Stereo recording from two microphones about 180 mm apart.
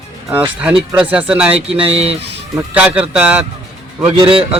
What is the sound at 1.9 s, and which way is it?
Speech, 35° right (ahead or behind).